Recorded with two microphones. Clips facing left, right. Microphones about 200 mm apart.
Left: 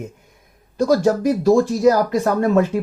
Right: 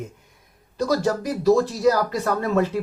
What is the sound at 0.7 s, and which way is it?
Speech, 50° left (ahead or behind).